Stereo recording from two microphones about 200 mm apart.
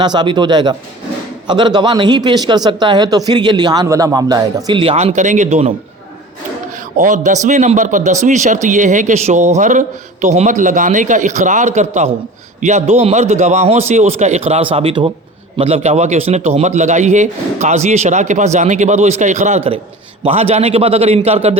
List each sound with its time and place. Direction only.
0.0 s a man's voice: 20° right (ahead or behind)
6.9 s a man's voice: 40° right (ahead or behind)